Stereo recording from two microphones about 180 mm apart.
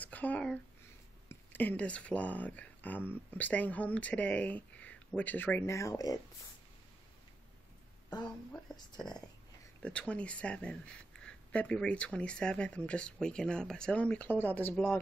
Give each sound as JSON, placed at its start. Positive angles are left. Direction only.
{"t": 0.0, "sound": "speech", "side_deg": 10}
{"t": 8.7, "sound": "speech", "side_deg": 25}
{"t": 9.8, "sound": "speech", "side_deg": 5}